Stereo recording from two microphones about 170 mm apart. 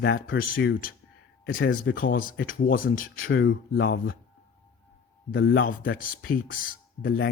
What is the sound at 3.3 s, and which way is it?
Speech, 80° left.